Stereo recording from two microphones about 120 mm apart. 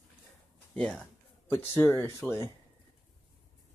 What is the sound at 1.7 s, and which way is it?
Speech, 20° left (ahead or behind).